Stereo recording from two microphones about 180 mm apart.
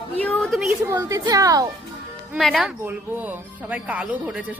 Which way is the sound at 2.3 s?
Centre (ahead or behind).